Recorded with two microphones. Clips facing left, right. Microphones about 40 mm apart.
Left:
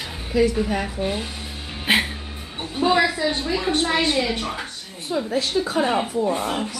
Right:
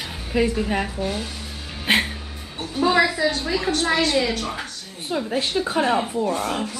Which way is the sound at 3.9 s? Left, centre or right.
Left.